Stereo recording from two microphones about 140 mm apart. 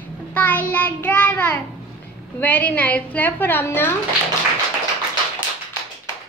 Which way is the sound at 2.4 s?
10° left (ahead or behind).